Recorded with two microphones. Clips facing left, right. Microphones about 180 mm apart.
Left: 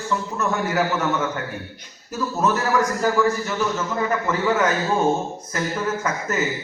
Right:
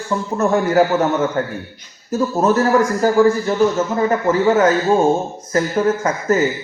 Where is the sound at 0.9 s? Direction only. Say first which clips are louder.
Right 6 dB; 50° right (ahead or behind).